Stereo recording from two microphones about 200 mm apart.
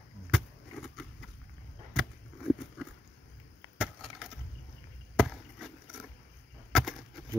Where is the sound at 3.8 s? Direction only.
Centre (ahead or behind).